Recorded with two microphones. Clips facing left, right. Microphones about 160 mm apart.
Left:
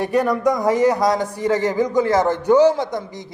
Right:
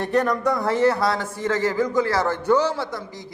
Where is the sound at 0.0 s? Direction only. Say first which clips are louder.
Left 3 dB; 10° left (ahead or behind).